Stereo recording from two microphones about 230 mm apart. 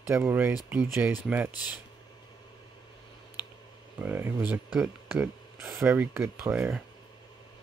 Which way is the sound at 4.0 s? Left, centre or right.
Centre.